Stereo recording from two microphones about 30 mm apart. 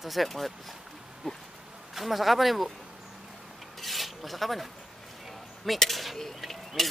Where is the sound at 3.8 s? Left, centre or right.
Centre.